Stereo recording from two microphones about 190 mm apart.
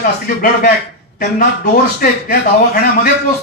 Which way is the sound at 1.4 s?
45° left (ahead or behind).